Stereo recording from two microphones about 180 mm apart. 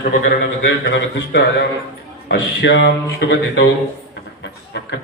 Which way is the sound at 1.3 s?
70° left (ahead or behind).